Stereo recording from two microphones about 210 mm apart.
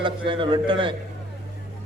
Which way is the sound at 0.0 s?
20° right (ahead or behind).